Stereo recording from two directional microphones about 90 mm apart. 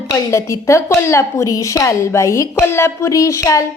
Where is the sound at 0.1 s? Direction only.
35° left (ahead or behind).